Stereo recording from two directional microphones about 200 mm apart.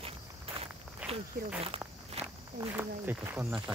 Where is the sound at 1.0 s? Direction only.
5° right (ahead or behind).